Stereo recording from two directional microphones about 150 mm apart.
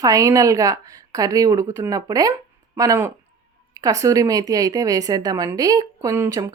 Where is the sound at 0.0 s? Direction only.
20° right (ahead or behind).